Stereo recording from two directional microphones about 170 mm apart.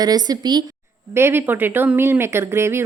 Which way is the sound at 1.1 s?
15° right (ahead or behind).